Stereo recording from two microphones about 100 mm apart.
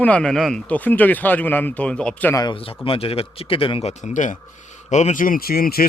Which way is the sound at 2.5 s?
65° left (ahead or behind).